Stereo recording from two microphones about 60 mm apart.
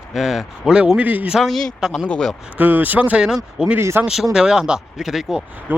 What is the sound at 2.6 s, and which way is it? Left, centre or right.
Speech, right.